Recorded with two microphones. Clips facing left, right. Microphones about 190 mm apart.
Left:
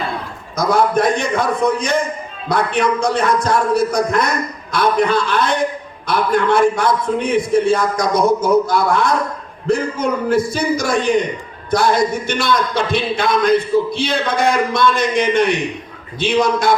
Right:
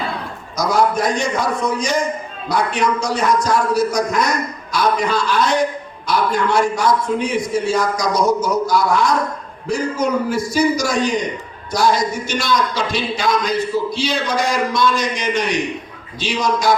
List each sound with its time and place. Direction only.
0.5 s a man's voice: 55° left (ahead or behind)